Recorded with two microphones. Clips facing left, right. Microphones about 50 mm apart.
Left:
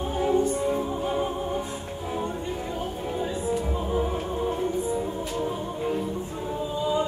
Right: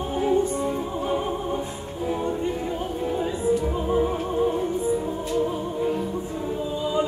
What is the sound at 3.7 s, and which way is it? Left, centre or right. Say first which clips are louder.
Music: right 4 dB; centre.